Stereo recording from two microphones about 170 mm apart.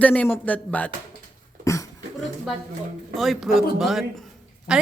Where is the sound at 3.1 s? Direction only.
Centre (ahead or behind).